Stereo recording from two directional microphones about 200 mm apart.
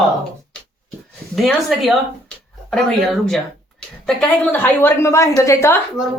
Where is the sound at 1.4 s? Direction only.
Centre (ahead or behind).